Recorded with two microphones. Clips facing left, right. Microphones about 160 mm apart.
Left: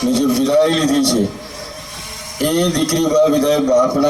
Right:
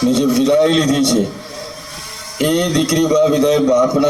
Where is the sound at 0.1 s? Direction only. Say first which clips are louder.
Left 1 dB; 20° right (ahead or behind).